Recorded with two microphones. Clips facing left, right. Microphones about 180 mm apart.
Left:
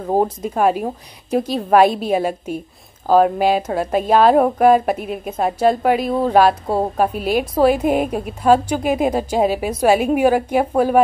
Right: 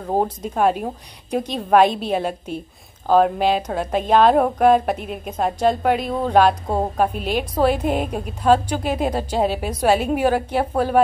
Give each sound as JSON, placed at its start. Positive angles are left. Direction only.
{"t": 0.1, "sound": "a woman's voice", "side_deg": 5}